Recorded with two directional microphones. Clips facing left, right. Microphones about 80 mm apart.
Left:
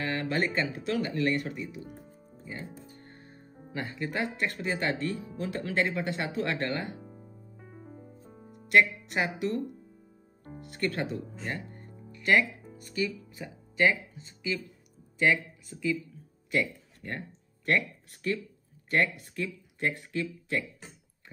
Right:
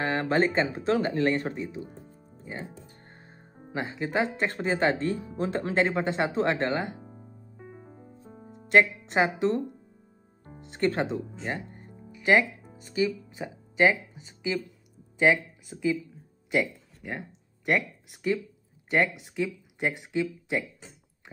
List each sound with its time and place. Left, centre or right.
0.0 s speech: right
3.0 s music: right
4.5 s speech: right
7.6 s music: right
10.6 s speech: right
16.4 s music: centre
17.6 s speech: centre